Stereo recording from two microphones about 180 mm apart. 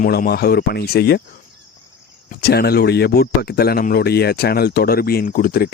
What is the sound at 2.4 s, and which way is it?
Speech, 60° left (ahead or behind).